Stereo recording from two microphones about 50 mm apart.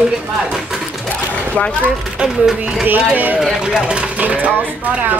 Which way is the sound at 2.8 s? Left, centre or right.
Right.